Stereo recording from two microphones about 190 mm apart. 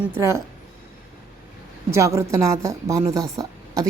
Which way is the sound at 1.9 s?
15° right (ahead or behind).